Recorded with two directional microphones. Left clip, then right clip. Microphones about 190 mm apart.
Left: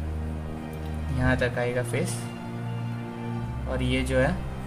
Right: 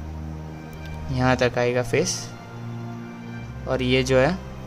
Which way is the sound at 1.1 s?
45° right (ahead or behind).